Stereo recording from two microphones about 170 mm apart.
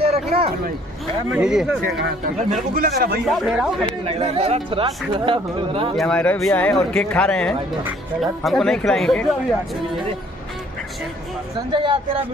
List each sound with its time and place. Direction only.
0.3 s speech: 65° right (ahead or behind)
1.3 s speech: 5° right (ahead or behind)
1.9 s speech: 70° right (ahead or behind)
3.3 s speech: centre (ahead or behind)
3.8 s speech: 35° right (ahead or behind)
5.9 s speech: 5° left (ahead or behind)
11.7 s speech: 30° right (ahead or behind)